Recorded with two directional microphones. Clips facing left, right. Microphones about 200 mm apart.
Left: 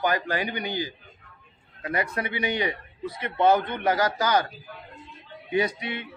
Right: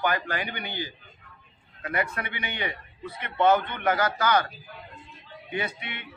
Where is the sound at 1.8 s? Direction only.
35° left (ahead or behind).